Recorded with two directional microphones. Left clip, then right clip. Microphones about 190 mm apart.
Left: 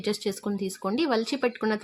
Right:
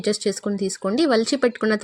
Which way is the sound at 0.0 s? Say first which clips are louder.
Right 6 dB; 15° right (ahead or behind).